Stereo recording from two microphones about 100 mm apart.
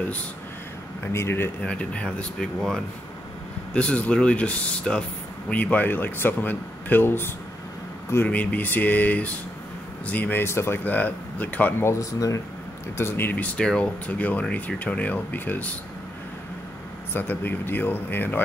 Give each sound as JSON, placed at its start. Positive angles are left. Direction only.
{"t": 1.0, "sound": "speech", "side_deg": 25}
{"t": 1.6, "sound": "speech", "side_deg": 10}
{"t": 11.9, "sound": "speech", "side_deg": 35}
{"t": 12.9, "sound": "speech", "side_deg": 25}
{"t": 17.1, "sound": "speech", "side_deg": 20}